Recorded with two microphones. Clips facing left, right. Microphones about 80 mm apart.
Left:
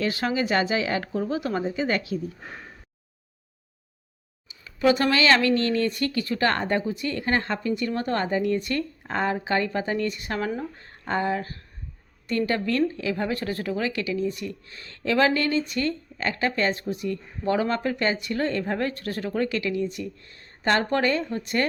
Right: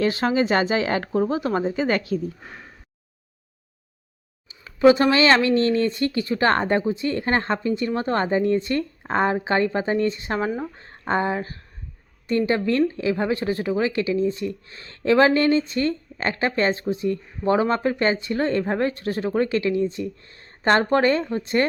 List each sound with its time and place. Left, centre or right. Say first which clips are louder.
0.0 s a woman's voice: right 5 dB; right
4.4 s speech: right 6 dB; right